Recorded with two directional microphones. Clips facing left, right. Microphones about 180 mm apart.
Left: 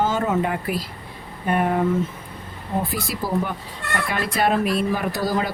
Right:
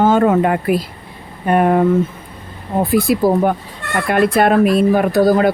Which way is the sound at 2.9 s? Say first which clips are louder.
Right 11 dB; 55° right (ahead or behind).